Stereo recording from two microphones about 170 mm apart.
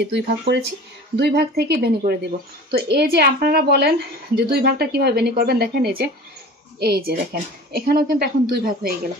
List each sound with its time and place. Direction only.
0.0 s a woman's voice: 75° right (ahead or behind)